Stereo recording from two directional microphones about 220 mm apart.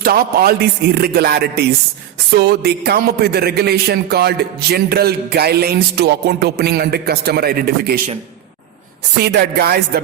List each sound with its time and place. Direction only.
0.0 s a man's voice: 45° right (ahead or behind)
9.2 s a man's voice: 45° right (ahead or behind)